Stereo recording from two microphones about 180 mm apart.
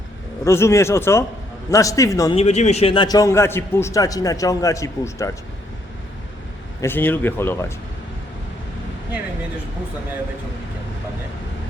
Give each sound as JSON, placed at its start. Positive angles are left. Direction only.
{"t": 0.4, "sound": "speech", "side_deg": 15}
{"t": 2.3, "sound": "a man's voice", "side_deg": 35}
{"t": 6.8, "sound": "speech", "side_deg": 10}